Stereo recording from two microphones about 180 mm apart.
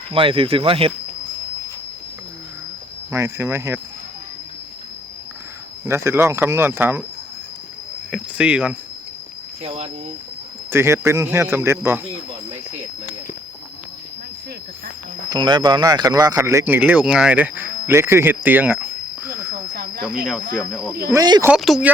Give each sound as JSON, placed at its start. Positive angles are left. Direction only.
{"t": 0.1, "sound": "speech", "side_deg": -30}
{"t": 3.1, "sound": "speech", "side_deg": -15}
{"t": 5.8, "sound": "speech", "side_deg": -15}
{"t": 8.1, "sound": "speech", "side_deg": -5}
{"t": 9.6, "sound": "speech", "side_deg": -35}
{"t": 10.7, "sound": "speech", "side_deg": -15}
{"t": 15.3, "sound": "speech", "side_deg": -25}
{"t": 21.1, "sound": "speech", "side_deg": -20}
{"t": 21.5, "sound": "speech", "side_deg": 0}